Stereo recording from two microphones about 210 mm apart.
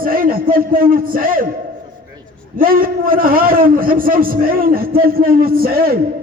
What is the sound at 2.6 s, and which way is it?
A man's voice, 45° right (ahead or behind).